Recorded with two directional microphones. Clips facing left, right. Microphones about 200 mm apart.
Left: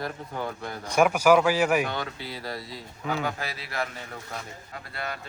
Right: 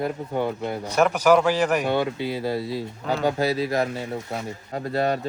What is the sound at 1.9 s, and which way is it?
Speech, 25° right (ahead or behind).